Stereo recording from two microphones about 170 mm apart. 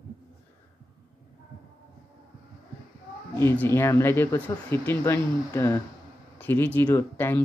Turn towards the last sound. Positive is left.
turn(degrees=15)  # may be behind; listen again after turning